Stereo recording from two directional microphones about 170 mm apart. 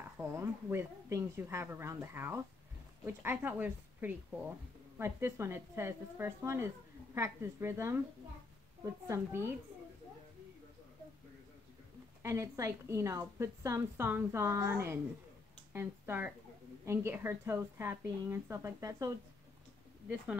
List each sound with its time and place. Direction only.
0.2 s speech: 15° right (ahead or behind)
9.0 s speech: 15° right (ahead or behind)
12.2 s speech: 15° right (ahead or behind)